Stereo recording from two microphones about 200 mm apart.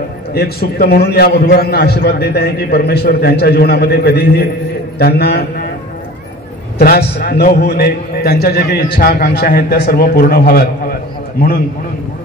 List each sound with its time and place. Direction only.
0.3 s a man's voice: 50° left (ahead or behind)
6.8 s a man's voice: 50° left (ahead or behind)